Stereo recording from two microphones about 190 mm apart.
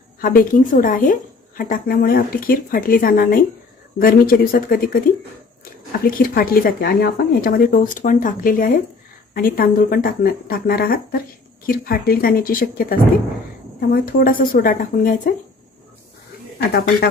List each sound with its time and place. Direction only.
0.2 s speech: 50° left (ahead or behind)